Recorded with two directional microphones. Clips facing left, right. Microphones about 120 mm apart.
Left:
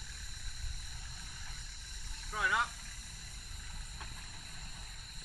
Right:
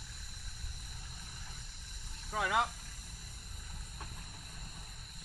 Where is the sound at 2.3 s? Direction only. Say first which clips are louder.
Right 2 dB; 70° right (ahead or behind).